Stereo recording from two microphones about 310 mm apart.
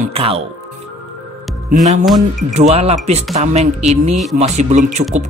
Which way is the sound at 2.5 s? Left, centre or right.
Right.